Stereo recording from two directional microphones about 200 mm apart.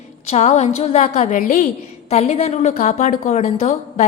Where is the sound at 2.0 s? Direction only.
30° left (ahead or behind).